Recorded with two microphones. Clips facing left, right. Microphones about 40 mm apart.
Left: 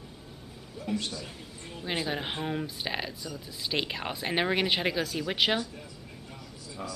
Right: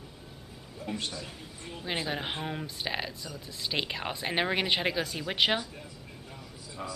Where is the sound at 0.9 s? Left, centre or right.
Right.